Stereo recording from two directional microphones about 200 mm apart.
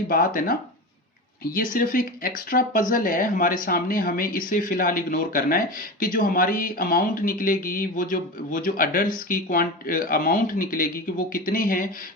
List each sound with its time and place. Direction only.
1.5 s speech: 45° left (ahead or behind)